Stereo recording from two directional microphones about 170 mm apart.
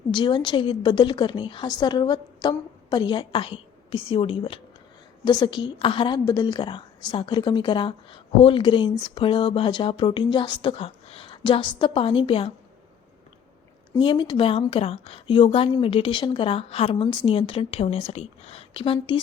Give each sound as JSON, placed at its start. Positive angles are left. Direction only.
{"t": 0.1, "sound": "a woman's voice", "side_deg": 25}
{"t": 14.0, "sound": "a woman's voice", "side_deg": 30}